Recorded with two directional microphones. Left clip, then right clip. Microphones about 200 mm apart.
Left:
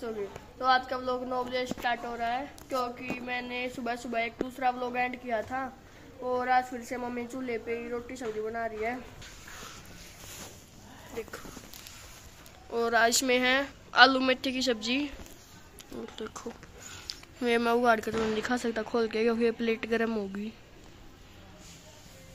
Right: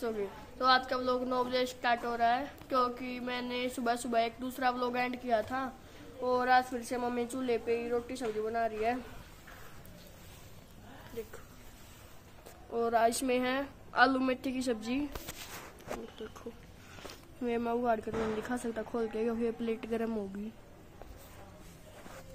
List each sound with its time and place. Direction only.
0.6 s a woman's voice: 10° right (ahead or behind)
12.7 s a woman's voice: 5° left (ahead or behind)
17.1 s a sound: 5° left (ahead or behind)
17.8 s speech: 10° left (ahead or behind)